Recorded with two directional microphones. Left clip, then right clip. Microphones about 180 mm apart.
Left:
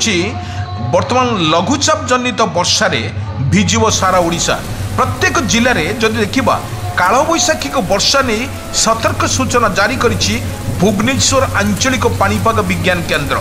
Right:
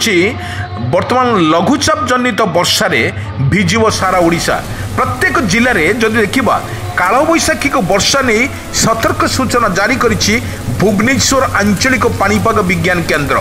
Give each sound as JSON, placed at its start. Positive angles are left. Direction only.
{"t": 1.1, "sound": "a man's voice", "side_deg": -10}
{"t": 1.4, "sound": "a man's voice", "side_deg": -25}